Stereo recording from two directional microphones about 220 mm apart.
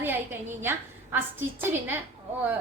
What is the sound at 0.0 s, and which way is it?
A woman's voice, 10° right (ahead or behind).